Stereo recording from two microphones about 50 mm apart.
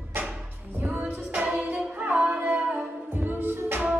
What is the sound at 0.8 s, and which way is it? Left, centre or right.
Music, right.